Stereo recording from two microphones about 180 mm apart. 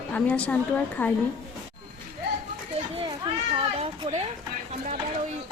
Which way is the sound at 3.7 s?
35° right (ahead or behind).